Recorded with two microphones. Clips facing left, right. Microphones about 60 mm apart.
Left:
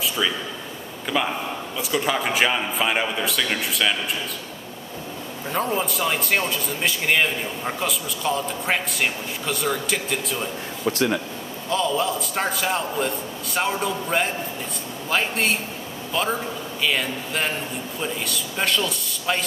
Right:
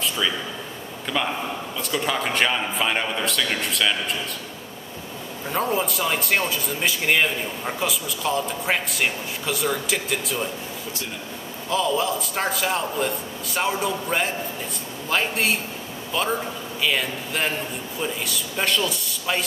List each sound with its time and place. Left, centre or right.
1.1 s a man's voice: centre
5.5 s speech: centre
10.9 s speech: left
11.7 s a man's voice: centre